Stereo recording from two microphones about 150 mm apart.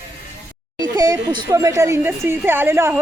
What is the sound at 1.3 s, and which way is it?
A woman's voice, 20° right (ahead or behind).